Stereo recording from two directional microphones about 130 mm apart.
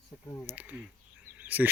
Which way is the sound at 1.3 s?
15° right (ahead or behind).